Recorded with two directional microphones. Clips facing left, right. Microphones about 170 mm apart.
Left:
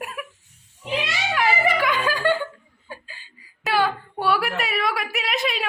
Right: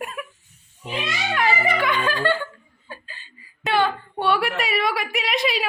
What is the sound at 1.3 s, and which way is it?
Music, 5° left (ahead or behind).